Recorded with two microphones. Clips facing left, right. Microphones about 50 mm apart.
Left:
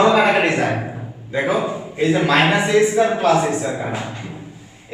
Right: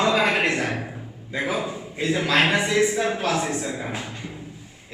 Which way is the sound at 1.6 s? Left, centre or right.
Left.